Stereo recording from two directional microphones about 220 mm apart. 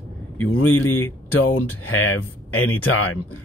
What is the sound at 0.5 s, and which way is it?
Speech, 80° left.